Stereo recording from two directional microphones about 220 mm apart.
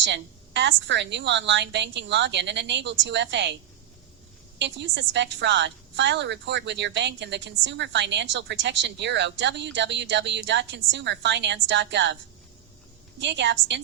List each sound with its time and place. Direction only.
0.0 s a woman's voice: 55° right (ahead or behind)
4.5 s a woman's voice: 55° right (ahead or behind)
13.1 s a woman's voice: 55° right (ahead or behind)